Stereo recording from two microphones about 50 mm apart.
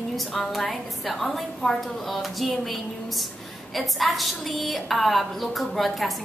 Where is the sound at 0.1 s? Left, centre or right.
Centre.